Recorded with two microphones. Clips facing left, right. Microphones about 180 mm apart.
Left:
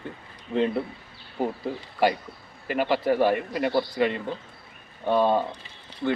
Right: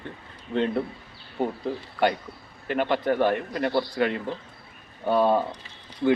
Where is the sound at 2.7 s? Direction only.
5° left (ahead or behind).